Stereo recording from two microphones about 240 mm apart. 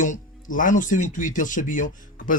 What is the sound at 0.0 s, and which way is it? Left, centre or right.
Speech, left.